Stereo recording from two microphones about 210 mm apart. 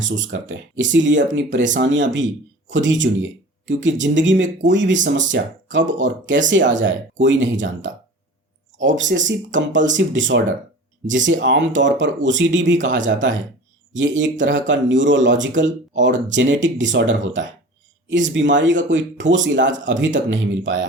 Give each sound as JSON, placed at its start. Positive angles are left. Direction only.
{"t": 0.0, "sound": "speech", "side_deg": -60}
{"t": 8.8, "sound": "speech", "side_deg": -60}